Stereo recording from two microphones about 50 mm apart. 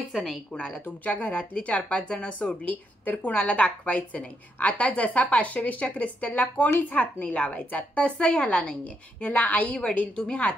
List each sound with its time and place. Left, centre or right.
0.1 s a woman's voice: centre
0.5 s speech: centre
0.8 s a woman's voice: left
8.2 s speech: left
9.2 s a woman's voice: left
9.8 s speech: centre